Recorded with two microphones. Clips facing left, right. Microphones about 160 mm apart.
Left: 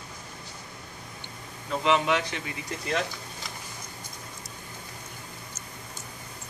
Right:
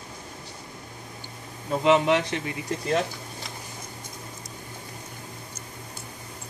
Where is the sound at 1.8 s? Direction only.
50° right (ahead or behind).